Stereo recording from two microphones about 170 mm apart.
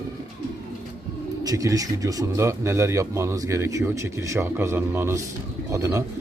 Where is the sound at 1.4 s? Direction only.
20° right (ahead or behind).